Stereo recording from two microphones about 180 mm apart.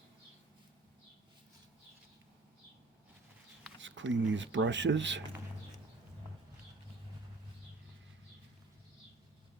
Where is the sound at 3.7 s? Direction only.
90° right.